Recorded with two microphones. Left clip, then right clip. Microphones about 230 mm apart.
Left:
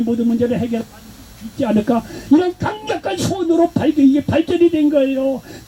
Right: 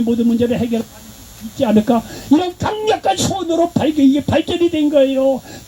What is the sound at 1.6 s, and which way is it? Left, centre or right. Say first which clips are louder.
Speech: right 3 dB; right.